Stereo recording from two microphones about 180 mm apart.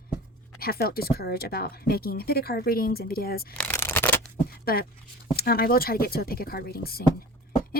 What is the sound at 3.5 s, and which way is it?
Shuffling cards, 10° left (ahead or behind).